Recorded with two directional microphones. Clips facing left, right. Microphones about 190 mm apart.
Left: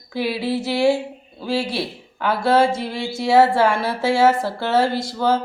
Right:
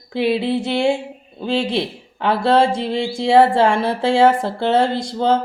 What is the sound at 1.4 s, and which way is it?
Speech, 20° right (ahead or behind).